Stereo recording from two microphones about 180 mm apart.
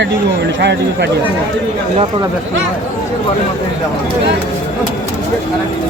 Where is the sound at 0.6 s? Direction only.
70° right (ahead or behind).